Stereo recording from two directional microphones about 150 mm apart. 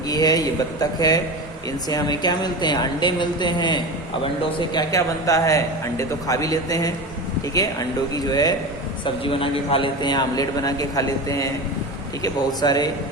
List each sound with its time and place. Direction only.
0.1 s a man's voice: 25° left (ahead or behind)